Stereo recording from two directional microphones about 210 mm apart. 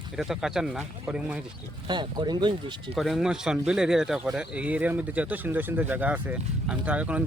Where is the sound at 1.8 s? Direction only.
20° right (ahead or behind).